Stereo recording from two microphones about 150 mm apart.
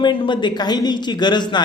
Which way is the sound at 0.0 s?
30° left (ahead or behind).